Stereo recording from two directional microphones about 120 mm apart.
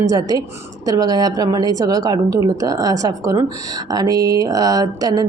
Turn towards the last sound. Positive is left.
turn(degrees=-30)  # may be behind; listen again after turning